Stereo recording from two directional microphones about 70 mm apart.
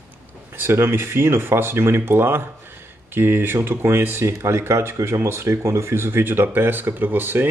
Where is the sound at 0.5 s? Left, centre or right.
Right.